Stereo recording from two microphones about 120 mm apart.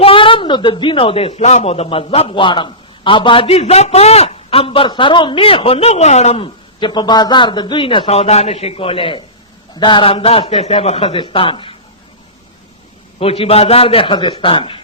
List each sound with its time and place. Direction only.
0.0 s a man's voice: 50° left (ahead or behind)
13.1 s a man's voice: 55° left (ahead or behind)